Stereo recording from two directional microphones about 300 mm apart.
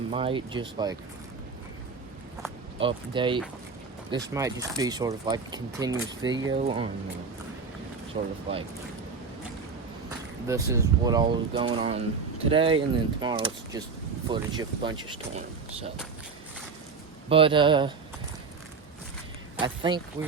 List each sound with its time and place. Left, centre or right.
0.1 s speech: centre
2.7 s speech: centre
8.1 s speech: right
10.4 s speech: centre
17.2 s speech: centre
19.5 s speech: centre